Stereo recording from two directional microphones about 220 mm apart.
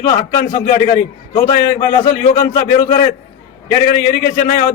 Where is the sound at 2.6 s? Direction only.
45° left (ahead or behind).